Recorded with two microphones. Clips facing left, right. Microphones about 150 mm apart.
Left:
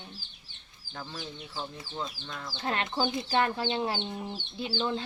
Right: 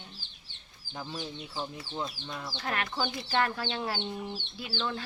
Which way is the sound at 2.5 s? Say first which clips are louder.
Left 3 dB; 25° left (ahead or behind).